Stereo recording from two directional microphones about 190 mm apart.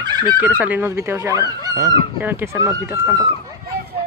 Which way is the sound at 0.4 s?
10° right (ahead or behind).